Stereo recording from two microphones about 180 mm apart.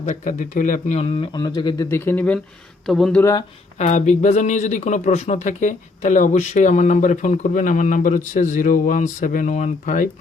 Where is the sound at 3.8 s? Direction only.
40° left (ahead or behind).